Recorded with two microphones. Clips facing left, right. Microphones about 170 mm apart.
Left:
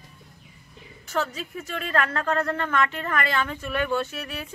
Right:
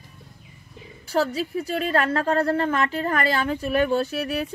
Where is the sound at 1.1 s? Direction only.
35° right (ahead or behind).